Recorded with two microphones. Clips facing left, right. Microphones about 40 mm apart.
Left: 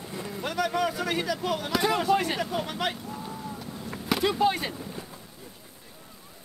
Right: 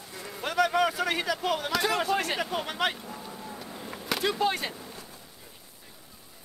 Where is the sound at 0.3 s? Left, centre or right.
Centre.